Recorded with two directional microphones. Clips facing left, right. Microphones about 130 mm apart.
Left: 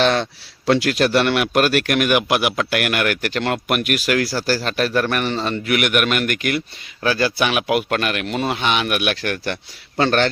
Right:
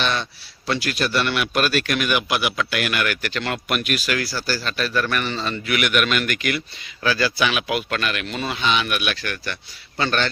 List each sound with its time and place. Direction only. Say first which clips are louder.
0.0 s a man's voice: left 7 dB; 90° left; by 10.2 s 70° left (ahead or behind)